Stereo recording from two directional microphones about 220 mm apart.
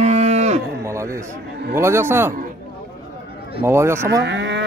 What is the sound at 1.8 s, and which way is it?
Speech, 10° right (ahead or behind).